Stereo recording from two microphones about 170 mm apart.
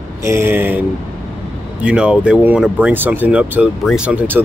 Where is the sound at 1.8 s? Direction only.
5° right (ahead or behind).